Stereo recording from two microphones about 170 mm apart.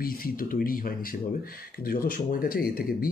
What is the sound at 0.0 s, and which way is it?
Speech, 60° left (ahead or behind).